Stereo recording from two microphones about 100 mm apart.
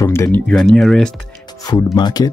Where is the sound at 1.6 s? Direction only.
45° left (ahead or behind).